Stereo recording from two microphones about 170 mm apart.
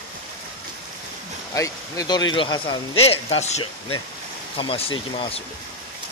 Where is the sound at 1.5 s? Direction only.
20° left (ahead or behind).